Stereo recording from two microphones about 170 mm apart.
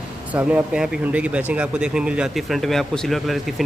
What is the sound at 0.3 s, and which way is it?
Speech, 10° right (ahead or behind).